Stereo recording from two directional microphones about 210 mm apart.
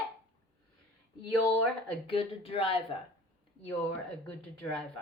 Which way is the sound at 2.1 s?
25° left (ahead or behind).